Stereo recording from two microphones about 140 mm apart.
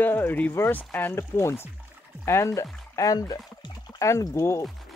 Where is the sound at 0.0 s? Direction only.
15° left (ahead or behind).